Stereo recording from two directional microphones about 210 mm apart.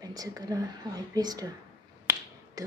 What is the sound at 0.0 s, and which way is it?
Speech, 15° right (ahead or behind).